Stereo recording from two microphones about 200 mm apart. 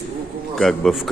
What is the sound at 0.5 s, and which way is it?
Speech, centre (ahead or behind).